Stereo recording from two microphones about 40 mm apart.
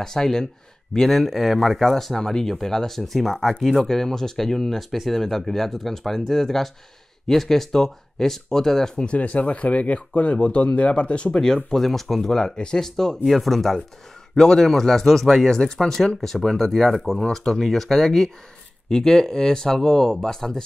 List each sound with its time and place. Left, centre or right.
0.0 s speech: centre
4.7 s speech: centre
9.0 s speech: left
11.3 s speech: centre
11.7 s speech: centre
12.5 s speech: left
12.8 s speech: centre